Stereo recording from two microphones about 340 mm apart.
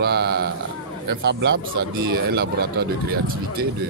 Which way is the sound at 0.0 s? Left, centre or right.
Right.